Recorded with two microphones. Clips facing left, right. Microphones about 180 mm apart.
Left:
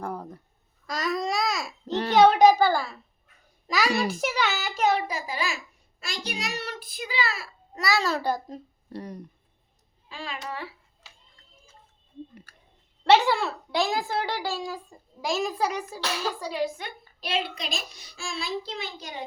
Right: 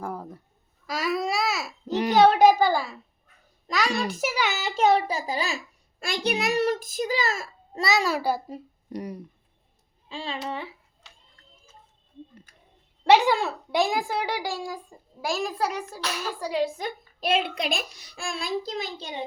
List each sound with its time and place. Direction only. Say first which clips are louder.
0.0 s a sound: even; 5° right (ahead or behind)
0.9 s babbling: right 1 dB; 5° right (ahead or behind)
2.1 s speech: even; centre (ahead or behind)
3.7 s a child's voice: left 1 dB; 5° left (ahead or behind)
4.5 s a child's voice: right 3 dB; 25° right (ahead or behind)
6.0 s a woman's voice: right 8 dB; 60° right (ahead or behind)
7.7 s speech: right 1 dB; 25° right (ahead or behind)
10.1 s a child's voice: right 4 dB; 25° right (ahead or behind)
13.1 s speech: right 1 dB; 15° right (ahead or behind)
15.2 s a child's voice: left 1 dB; centre (ahead or behind)
16.4 s speech: right 7 dB; 15° right (ahead or behind)
16.6 s a woman's voice: right 2 dB; 35° right (ahead or behind)